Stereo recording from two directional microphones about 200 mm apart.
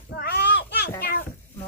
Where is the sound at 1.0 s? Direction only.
50° left (ahead or behind).